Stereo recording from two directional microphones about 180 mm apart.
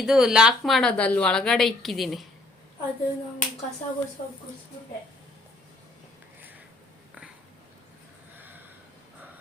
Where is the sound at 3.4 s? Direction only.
45° left (ahead or behind).